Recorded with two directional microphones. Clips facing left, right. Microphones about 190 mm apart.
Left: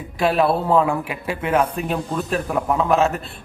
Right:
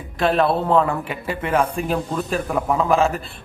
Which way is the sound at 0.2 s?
5° left (ahead or behind).